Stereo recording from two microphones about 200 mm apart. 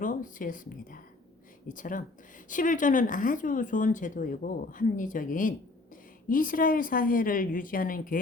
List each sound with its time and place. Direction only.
0.0 s a woman's voice: 40° left (ahead or behind)